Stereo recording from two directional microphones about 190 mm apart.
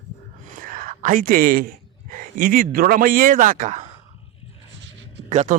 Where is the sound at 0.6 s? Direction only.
45° right (ahead or behind).